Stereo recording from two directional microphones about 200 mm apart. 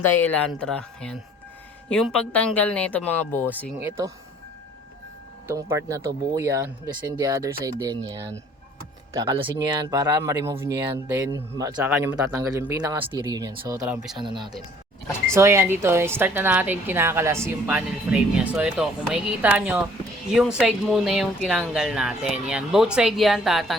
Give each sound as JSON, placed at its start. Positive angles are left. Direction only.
{"t": 0.0, "sound": "speech", "side_deg": 10}
{"t": 5.5, "sound": "a woman's voice", "side_deg": -15}
{"t": 9.1, "sound": "a woman's voice", "side_deg": -20}
{"t": 13.8, "sound": "speech", "side_deg": -5}
{"t": 14.2, "sound": "a woman's voice", "side_deg": -25}